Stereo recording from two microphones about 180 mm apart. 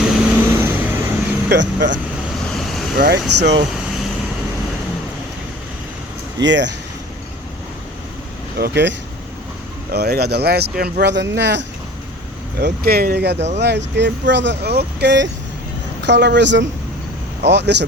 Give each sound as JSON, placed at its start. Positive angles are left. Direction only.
{"t": 0.0, "sound": "vehicle", "side_deg": -5}
{"t": 1.5, "sound": "speech", "side_deg": -85}
{"t": 2.6, "sound": "vehicle", "side_deg": 0}
{"t": 3.0, "sound": "speech", "side_deg": -70}
{"t": 6.4, "sound": "speech", "side_deg": -80}
{"t": 8.5, "sound": "speech", "side_deg": -65}
{"t": 12.5, "sound": "speech", "side_deg": -60}